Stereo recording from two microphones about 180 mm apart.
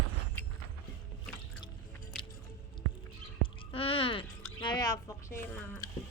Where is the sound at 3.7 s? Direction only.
30° left (ahead or behind).